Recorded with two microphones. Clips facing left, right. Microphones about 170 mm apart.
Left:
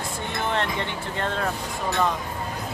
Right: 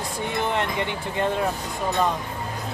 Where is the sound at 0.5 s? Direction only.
15° right (ahead or behind).